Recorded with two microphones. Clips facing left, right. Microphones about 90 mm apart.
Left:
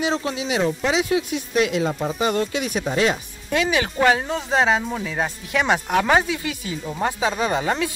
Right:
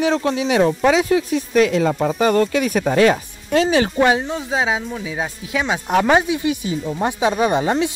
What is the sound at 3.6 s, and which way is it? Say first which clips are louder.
Speech: right 5 dB; 30° right (ahead or behind).